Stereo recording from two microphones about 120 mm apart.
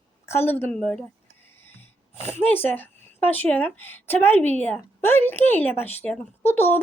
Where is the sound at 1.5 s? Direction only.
20° left (ahead or behind).